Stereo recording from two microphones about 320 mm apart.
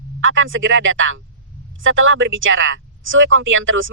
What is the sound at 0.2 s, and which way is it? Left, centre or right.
Speech, right.